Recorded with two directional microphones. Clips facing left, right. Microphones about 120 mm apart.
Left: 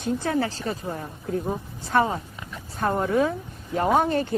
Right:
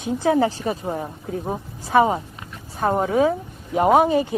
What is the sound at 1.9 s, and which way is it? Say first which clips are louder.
Speech: right 5 dB; 15° right (ahead or behind).